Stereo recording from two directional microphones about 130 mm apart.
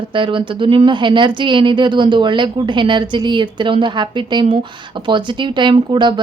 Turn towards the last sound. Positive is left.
turn(degrees=-35)  # may be behind; listen again after turning